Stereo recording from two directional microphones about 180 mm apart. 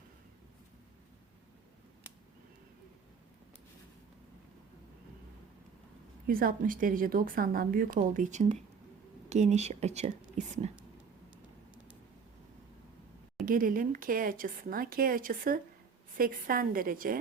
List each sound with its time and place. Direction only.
6.2 s a woman's voice: 55° right (ahead or behind)
13.4 s a woman's voice: 50° right (ahead or behind)